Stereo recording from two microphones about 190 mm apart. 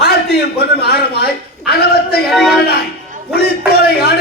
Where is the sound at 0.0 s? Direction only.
55° left (ahead or behind).